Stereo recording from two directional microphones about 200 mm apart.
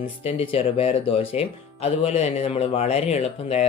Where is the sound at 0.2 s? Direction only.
30° left (ahead or behind).